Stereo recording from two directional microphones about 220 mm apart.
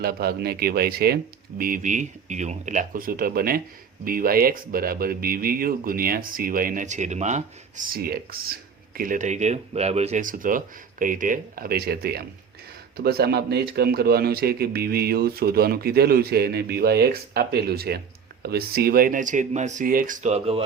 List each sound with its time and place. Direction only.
0.0 s speech: 45° right (ahead or behind); by 20.6 s 30° right (ahead or behind)